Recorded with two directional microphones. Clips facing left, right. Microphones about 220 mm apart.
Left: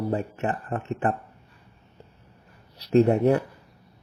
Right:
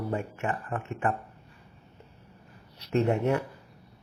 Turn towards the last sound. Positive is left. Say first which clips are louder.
# left 6 dB
turn(degrees=35)  # may be behind; listen again after turning